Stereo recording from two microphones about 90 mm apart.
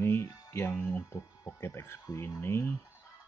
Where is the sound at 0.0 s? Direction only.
30° left (ahead or behind).